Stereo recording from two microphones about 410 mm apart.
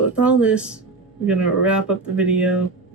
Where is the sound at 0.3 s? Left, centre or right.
Centre.